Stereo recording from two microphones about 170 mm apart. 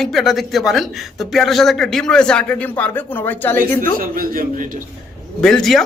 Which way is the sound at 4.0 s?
55° right (ahead or behind).